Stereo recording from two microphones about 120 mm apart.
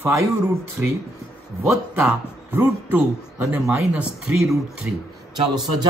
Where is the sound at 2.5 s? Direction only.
15° right (ahead or behind).